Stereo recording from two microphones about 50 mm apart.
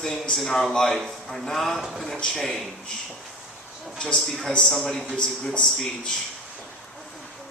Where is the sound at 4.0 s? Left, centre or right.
Centre.